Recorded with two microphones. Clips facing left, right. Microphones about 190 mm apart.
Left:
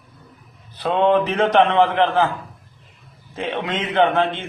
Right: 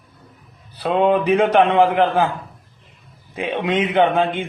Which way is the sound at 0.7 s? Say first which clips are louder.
Even; 10° right (ahead or behind).